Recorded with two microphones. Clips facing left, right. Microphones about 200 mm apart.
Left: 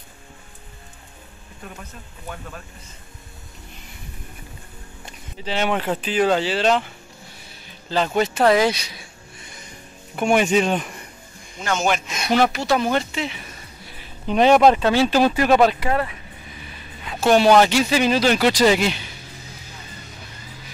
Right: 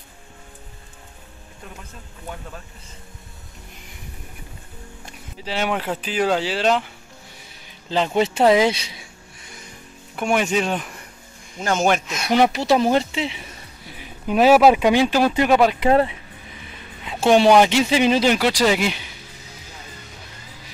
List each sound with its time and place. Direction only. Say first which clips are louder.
5.4 s speech: left 1 dB; 5° right (ahead or behind)
7.9 s speech: right 1 dB; 20° right (ahead or behind)
10.1 s speech: left 3 dB; centre (ahead or behind)
11.6 s speech: right 3 dB; 45° right (ahead or behind)
12.2 s speech: even; 15° right (ahead or behind)
12.5 s speech: right 3 dB; 35° right (ahead or behind)
13.9 s speech: even; 5° right (ahead or behind)
15.8 s speech: right 6 dB; 25° right (ahead or behind)
17.6 s speech: right 1 dB; 20° right (ahead or behind)